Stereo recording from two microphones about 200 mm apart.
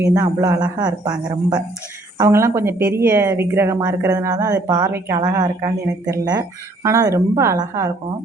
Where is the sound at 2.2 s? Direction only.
15° right (ahead or behind).